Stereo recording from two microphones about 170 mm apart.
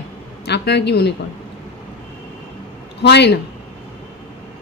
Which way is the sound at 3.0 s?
85° left.